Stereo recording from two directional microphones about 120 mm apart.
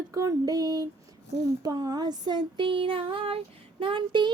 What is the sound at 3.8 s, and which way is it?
Speech, 40° right (ahead or behind).